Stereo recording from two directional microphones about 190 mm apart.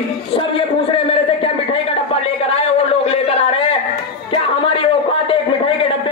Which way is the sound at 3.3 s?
30° left (ahead or behind).